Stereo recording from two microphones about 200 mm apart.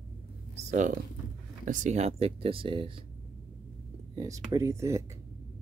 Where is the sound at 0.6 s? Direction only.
40° right (ahead or behind).